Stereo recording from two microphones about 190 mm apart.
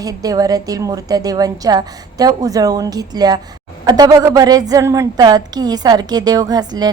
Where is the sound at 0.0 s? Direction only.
20° right (ahead or behind).